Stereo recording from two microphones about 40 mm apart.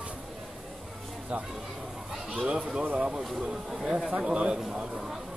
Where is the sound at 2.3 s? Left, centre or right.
Right.